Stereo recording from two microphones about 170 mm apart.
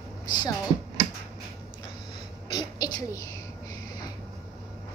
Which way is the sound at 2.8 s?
20° left (ahead or behind).